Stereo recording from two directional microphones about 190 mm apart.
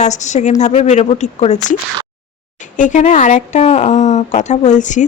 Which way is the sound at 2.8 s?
40° left (ahead or behind).